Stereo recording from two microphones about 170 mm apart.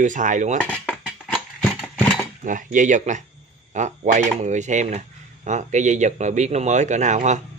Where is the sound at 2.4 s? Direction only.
50° right (ahead or behind).